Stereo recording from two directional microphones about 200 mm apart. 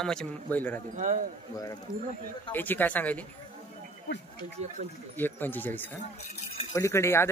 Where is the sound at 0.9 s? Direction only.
40° right (ahead or behind).